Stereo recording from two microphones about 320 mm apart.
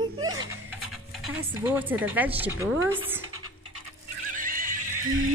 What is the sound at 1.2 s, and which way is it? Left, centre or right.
A woman's voice, centre.